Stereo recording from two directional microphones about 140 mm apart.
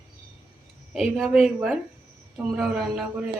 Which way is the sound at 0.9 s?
Centre (ahead or behind).